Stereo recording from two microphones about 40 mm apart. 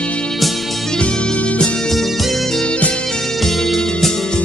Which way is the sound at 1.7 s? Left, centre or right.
Centre.